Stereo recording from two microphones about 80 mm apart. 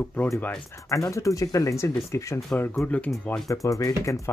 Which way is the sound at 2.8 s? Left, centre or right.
Centre.